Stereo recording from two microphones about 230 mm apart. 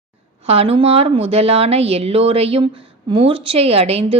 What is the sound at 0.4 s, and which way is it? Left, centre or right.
A woman's voice, right.